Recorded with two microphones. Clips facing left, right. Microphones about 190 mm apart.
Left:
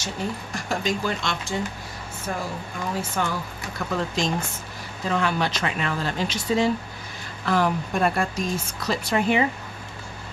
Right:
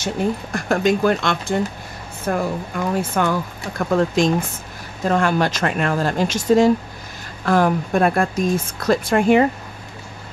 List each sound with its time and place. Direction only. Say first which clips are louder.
0.0 s speech: right 8 dB; 55° right (ahead or behind)